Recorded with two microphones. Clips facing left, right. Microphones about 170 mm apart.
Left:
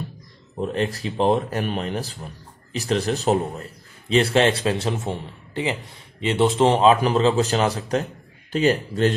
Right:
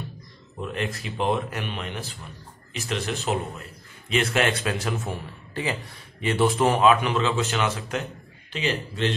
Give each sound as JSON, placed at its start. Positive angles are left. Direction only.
{"t": 0.6, "sound": "a man's voice", "side_deg": 35}